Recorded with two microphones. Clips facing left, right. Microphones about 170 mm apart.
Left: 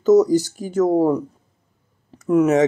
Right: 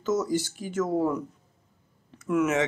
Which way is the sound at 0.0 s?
40° left (ahead or behind).